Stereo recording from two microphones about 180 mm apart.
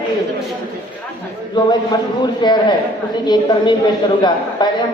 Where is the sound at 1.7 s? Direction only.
25° left (ahead or behind).